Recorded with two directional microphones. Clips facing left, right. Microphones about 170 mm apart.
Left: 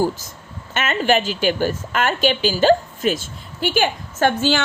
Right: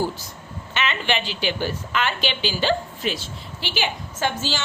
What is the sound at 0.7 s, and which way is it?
A woman's voice, 45° left (ahead or behind).